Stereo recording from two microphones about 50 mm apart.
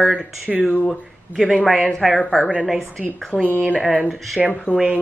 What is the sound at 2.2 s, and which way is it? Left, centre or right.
Speech, centre.